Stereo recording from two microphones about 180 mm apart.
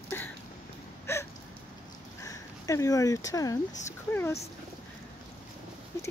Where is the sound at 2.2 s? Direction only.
20° left (ahead or behind).